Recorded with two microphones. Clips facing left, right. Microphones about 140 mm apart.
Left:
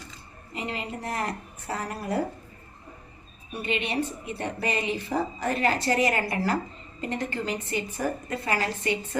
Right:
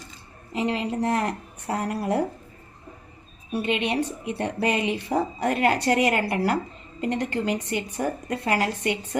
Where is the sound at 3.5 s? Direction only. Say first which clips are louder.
Right 4 dB; 85° right.